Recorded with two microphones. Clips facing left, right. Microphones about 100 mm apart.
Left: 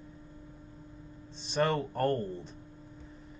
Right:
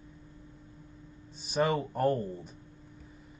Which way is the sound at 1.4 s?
5° right (ahead or behind).